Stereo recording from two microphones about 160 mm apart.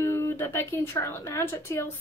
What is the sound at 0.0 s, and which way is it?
Speech, 20° left (ahead or behind).